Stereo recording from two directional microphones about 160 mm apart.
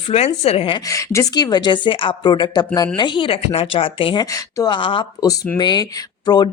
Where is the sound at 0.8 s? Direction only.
20° left (ahead or behind).